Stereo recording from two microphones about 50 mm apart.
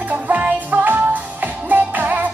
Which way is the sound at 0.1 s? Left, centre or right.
Right.